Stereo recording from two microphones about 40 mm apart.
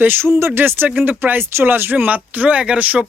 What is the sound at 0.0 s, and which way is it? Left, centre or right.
Speech, right.